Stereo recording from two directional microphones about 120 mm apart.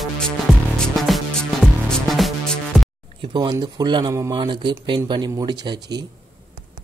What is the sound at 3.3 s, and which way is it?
Speech, 35° right (ahead or behind).